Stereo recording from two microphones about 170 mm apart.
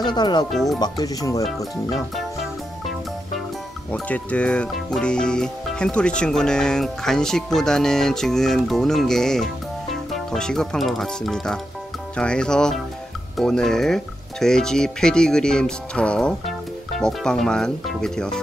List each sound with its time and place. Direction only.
0.0 s speech: 25° left (ahead or behind)
0.5 s speech: centre (ahead or behind)
0.7 s speech: 25° left (ahead or behind)
1.9 s music: centre (ahead or behind)
3.9 s speech: 5° left (ahead or behind)